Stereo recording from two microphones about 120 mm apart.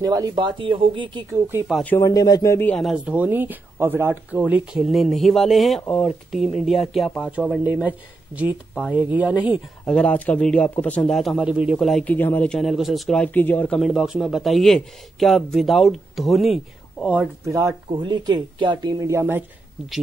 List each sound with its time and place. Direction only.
0.0 s speech: 30° right (ahead or behind)
2.0 s a man's voice: 30° left (ahead or behind)
2.8 s a man's voice: 5° right (ahead or behind)
3.2 s speech: 15° right (ahead or behind)
4.8 s a man's voice: centre (ahead or behind)
5.8 s speech: 10° left (ahead or behind)
6.3 s a man's voice: centre (ahead or behind)
7.2 s speech: 10° right (ahead or behind)
9.8 s speech: 10° left (ahead or behind)
11.4 s speech: 10° right (ahead or behind)
12.0 s speech: 15° left (ahead or behind)
12.4 s a man's voice: centre (ahead or behind)
13.7 s a man's voice: centre (ahead or behind)
17.5 s speech: 25° right (ahead or behind)